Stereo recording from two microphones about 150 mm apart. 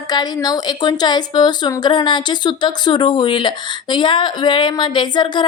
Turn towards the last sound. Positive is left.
turn(degrees=30)  # may be behind; listen again after turning